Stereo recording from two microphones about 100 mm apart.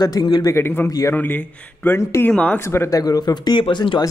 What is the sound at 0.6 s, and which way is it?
Speech, 20° left (ahead or behind).